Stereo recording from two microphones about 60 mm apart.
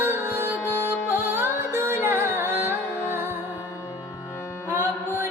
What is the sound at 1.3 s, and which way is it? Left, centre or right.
Music, right.